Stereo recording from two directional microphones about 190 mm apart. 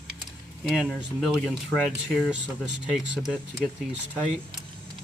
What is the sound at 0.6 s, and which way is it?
Speech, centre (ahead or behind).